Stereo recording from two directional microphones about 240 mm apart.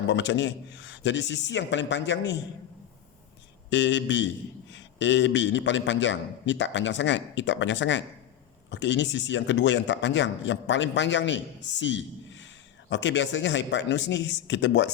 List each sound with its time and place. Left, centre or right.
0.1 s a man's voice: left
3.7 s a man's voice: left